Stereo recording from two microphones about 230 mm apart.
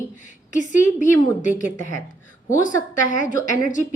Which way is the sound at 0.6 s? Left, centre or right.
Left.